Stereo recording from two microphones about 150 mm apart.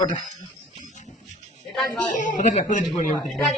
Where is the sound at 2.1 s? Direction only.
60° left (ahead or behind).